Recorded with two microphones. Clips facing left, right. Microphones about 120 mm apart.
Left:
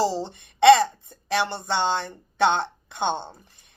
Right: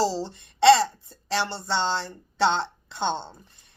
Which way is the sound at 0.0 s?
15° left (ahead or behind).